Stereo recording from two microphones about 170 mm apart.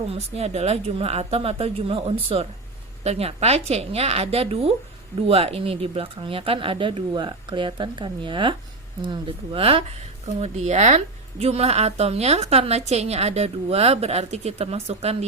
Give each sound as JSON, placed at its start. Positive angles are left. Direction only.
{"t": 0.1, "sound": "speech", "side_deg": -40}